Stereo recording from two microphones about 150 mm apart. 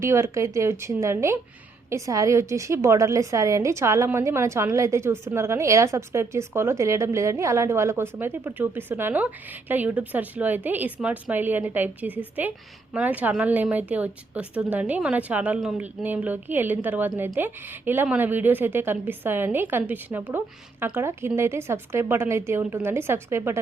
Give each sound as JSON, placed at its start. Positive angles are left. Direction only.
{"t": 0.0, "sound": "a woman's voice", "side_deg": -20}